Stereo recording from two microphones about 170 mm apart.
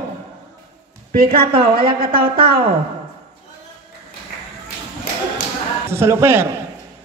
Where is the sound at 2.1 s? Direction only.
60° right (ahead or behind).